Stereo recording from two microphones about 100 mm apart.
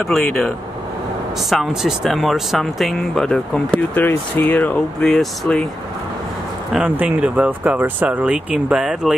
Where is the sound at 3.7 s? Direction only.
15° left (ahead or behind).